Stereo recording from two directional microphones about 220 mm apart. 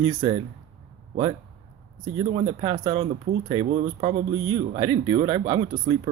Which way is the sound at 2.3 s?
25° right (ahead or behind).